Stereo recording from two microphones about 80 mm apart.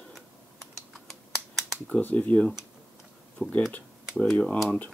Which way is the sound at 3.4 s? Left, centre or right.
Centre.